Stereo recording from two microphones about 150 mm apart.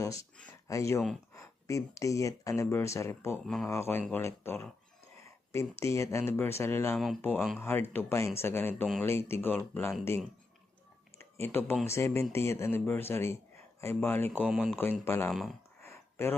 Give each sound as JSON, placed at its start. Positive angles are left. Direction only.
{"t": 0.0, "sound": "speech", "side_deg": 20}
{"t": 3.4, "sound": "speech", "side_deg": 0}
{"t": 3.7, "sound": "speech", "side_deg": 15}
{"t": 11.2, "sound": "speech", "side_deg": 15}
{"t": 14.5, "sound": "speech", "side_deg": -5}
{"t": 15.0, "sound": "speech", "side_deg": 15}
{"t": 15.3, "sound": "speech", "side_deg": 0}
{"t": 15.8, "sound": "a sound", "side_deg": 15}